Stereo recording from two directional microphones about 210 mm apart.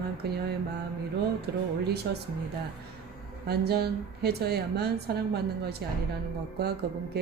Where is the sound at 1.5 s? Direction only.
50° right (ahead or behind).